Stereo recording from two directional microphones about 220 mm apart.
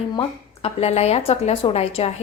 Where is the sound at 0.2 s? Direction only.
25° left (ahead or behind).